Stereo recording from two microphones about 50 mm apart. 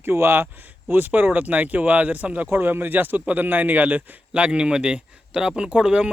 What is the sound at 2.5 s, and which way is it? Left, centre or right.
Speech, right.